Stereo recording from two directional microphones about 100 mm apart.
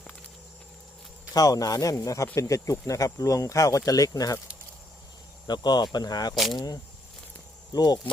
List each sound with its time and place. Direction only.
1.3 s speech: 35° left (ahead or behind)
5.5 s speech: 45° left (ahead or behind)
6.3 s speech: centre (ahead or behind)
7.7 s speech: 40° left (ahead or behind)